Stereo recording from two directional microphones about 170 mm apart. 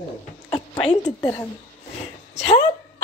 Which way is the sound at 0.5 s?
30° left (ahead or behind).